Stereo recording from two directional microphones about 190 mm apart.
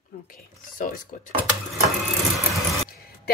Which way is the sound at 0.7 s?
45° left (ahead or behind).